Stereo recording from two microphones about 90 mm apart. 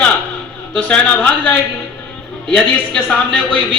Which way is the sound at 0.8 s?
15° left (ahead or behind).